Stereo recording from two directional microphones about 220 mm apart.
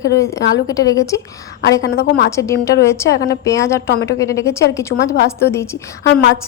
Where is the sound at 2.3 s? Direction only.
15° left (ahead or behind).